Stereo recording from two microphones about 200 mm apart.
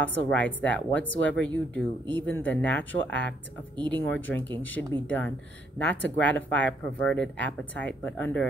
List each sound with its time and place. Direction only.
0.0 s speech: 10° left (ahead or behind)